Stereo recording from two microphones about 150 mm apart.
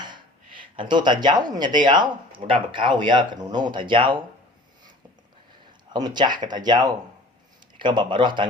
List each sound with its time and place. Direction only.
0.8 s speech: 30° right (ahead or behind)
5.9 s speech: 30° right (ahead or behind)